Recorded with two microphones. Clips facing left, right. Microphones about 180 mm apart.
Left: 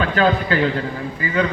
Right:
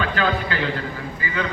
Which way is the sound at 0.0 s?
40° left (ahead or behind).